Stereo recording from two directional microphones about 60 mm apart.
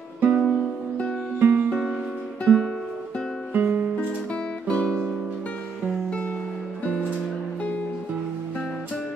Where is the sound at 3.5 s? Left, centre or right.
Right.